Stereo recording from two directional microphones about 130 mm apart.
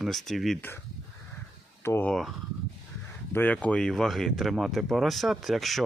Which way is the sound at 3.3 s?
10° left (ahead or behind).